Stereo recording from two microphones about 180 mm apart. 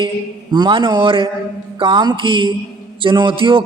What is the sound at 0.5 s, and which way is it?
A man's voice, 25° right (ahead or behind).